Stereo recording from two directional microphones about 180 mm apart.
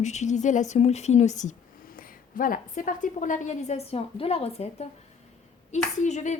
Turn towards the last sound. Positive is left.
turn(degrees=40)  # may be behind; listen again after turning